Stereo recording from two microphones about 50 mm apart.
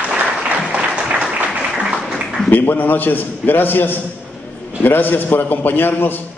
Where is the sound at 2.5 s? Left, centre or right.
Left.